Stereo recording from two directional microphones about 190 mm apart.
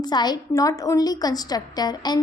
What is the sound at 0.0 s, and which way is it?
A woman's voice, 20° left (ahead or behind).